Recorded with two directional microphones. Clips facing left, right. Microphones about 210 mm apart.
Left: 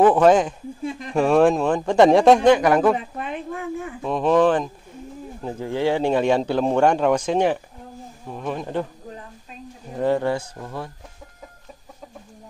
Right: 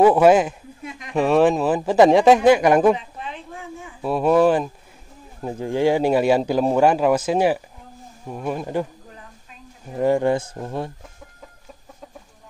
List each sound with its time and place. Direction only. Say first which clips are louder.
0.0 s a man's voice: right 1 dB; 10° right (ahead or behind)
0.8 s a sound: left 7 dB; 30° left (ahead or behind)
1.1 s a man's voice: even; centre (ahead or behind)
3.0 s a sound: left 5 dB; 55° left (ahead or behind)
4.0 s a man's voice: right 1 dB; 10° right (ahead or behind)
9.9 s a man's voice: right 2 dB; 10° right (ahead or behind)
10.5 s speech: right 4 dB; 25° right (ahead or behind)